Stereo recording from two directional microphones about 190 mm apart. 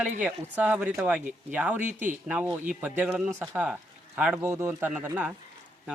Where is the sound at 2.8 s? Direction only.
10° right (ahead or behind).